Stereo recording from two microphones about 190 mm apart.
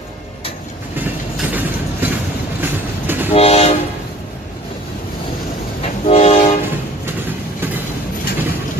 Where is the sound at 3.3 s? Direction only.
35° left (ahead or behind).